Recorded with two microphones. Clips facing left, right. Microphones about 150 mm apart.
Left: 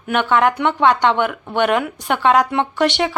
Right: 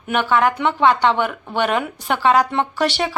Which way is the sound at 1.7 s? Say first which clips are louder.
Left 3 dB; 15° left (ahead or behind).